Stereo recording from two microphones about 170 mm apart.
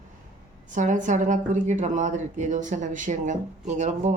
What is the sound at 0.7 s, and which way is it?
Speech, 50° right (ahead or behind).